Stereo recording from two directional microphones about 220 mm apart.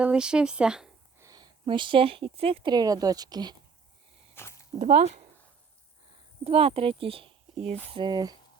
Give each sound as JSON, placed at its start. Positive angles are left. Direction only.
{"t": 0.0, "sound": "speech", "side_deg": -5}
{"t": 1.3, "sound": "speech", "side_deg": -20}
{"t": 4.4, "sound": "a sound", "side_deg": 10}
{"t": 4.8, "sound": "speech", "side_deg": -35}
{"t": 6.4, "sound": "speech", "side_deg": -25}